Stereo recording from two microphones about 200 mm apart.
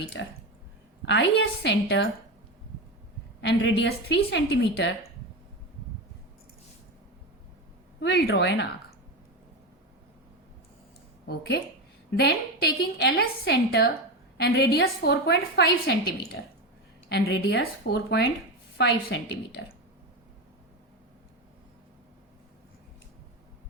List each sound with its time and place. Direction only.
0.1 s a woman's voice: 65° left (ahead or behind)
3.4 s a woman's voice: 65° left (ahead or behind)
8.0 s a woman's voice: 60° left (ahead or behind)
11.3 s a woman's voice: 55° left (ahead or behind)
17.1 s a woman's voice: 60° left (ahead or behind)